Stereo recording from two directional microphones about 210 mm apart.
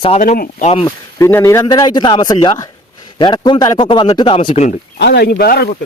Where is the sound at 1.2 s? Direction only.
10° left (ahead or behind).